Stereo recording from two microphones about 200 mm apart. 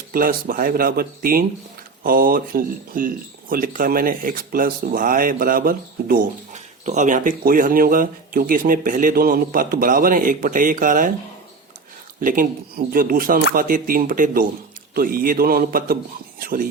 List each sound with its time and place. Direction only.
0.1 s speech: 45° right (ahead or behind)
12.2 s speech: 45° right (ahead or behind)